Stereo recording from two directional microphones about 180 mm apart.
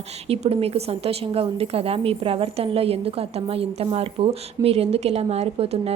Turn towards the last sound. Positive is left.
turn(degrees=-35)  # may be behind; listen again after turning